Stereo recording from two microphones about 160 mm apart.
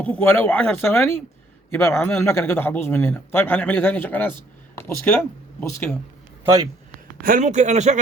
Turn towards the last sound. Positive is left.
turn(degrees=-45)  # may be behind; listen again after turning